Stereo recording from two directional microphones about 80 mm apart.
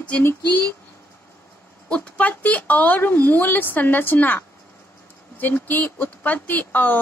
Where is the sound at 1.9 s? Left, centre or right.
Centre.